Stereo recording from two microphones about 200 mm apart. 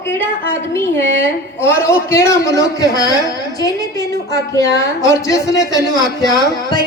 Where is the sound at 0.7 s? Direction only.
10° left (ahead or behind).